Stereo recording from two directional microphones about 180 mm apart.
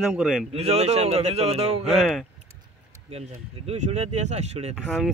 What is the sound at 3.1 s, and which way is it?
Speech, 35° right (ahead or behind).